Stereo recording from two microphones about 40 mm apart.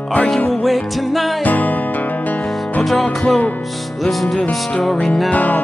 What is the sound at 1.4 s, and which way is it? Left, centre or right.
Music, left.